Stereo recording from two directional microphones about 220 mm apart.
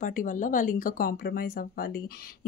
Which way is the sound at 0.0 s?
35° left (ahead or behind).